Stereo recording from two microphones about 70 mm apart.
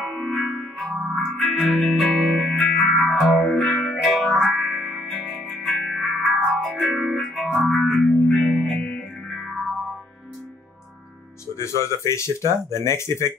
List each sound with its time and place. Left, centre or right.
0.0 s music: centre
11.5 s speech: left